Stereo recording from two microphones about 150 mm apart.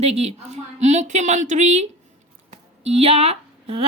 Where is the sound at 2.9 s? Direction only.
45° right (ahead or behind).